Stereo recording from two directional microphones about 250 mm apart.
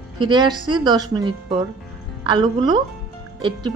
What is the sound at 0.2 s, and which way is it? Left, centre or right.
A woman's voice, centre.